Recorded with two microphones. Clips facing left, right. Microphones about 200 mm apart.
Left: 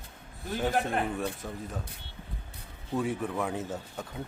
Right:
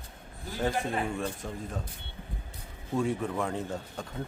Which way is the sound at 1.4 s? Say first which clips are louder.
Right 1 dB; 5° left (ahead or behind).